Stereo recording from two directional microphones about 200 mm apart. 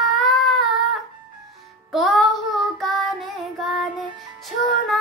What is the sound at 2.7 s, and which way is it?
Child singing, centre (ahead or behind).